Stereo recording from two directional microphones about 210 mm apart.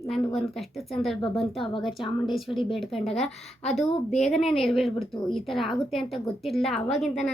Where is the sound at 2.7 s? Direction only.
Centre (ahead or behind).